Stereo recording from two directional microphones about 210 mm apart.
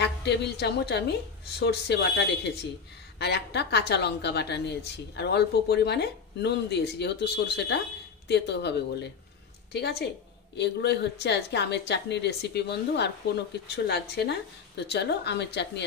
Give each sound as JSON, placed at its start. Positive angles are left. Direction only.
{"t": 0.0, "sound": "a woman's voice", "side_deg": 55}